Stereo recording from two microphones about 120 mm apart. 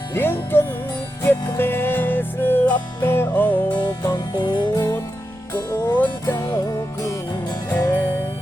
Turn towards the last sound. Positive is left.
turn(degrees=30)  # may be behind; listen again after turning